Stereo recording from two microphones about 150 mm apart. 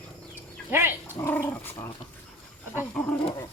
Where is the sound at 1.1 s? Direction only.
15° left (ahead or behind).